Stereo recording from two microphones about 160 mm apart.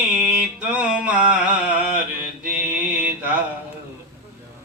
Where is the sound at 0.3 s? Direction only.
5° right (ahead or behind).